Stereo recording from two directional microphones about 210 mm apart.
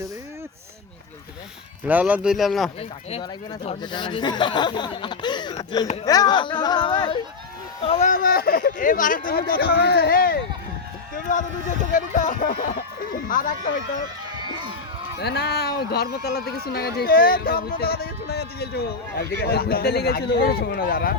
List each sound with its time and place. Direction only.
1.9 s speech: 5° right (ahead or behind)
3.1 s speech: 25° left (ahead or behind); by 10.3 s 45° left (ahead or behind)
11.1 s run: 40° left (ahead or behind)
11.9 s speech: 40° left (ahead or behind)
15.2 s speech: 50° left (ahead or behind)